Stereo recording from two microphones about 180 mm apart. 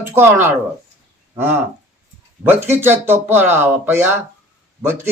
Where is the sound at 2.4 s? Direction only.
10° right (ahead or behind).